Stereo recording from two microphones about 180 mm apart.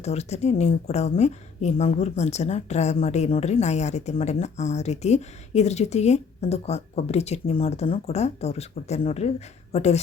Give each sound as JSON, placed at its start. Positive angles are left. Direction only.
{"t": 0.0, "sound": "a woman's voice", "side_deg": 35}